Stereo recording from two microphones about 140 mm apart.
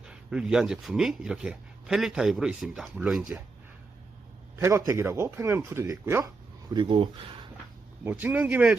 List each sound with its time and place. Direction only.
0.0 s speech: 5° right (ahead or behind)
4.5 s a man's voice: 20° right (ahead or behind)
8.0 s speech: 15° right (ahead or behind)